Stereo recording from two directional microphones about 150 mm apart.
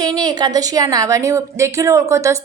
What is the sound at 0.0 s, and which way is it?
A woman's voice, 25° right (ahead or behind).